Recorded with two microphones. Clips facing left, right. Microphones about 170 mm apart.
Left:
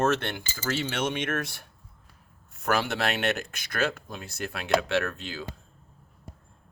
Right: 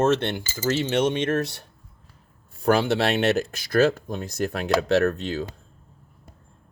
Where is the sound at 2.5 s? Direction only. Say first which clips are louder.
Right 7 dB; 30° right (ahead or behind).